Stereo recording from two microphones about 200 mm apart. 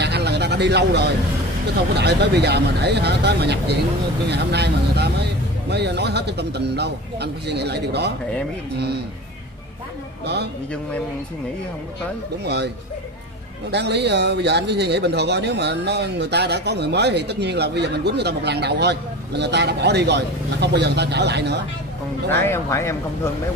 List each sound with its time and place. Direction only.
0.0 s a sound: 55° right (ahead or behind)
1.8 s speech: 55° right (ahead or behind)
10.2 s speech: 55° right (ahead or behind)
12.4 s speech: 55° right (ahead or behind)
22.4 s speech: 15° left (ahead or behind)